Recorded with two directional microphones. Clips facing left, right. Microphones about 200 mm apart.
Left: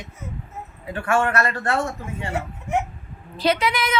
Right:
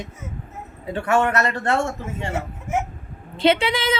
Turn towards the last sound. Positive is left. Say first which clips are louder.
# right 3 dB
turn(degrees=-30)  # may be behind; listen again after turning